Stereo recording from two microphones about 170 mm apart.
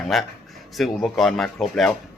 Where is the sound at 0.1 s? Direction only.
Centre (ahead or behind).